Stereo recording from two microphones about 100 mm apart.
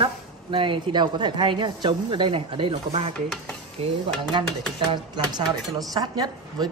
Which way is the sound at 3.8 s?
80° right.